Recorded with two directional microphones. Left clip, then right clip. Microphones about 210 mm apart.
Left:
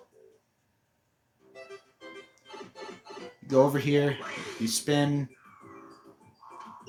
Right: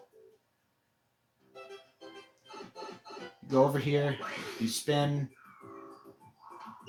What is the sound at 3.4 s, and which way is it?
Speech, 30° left (ahead or behind).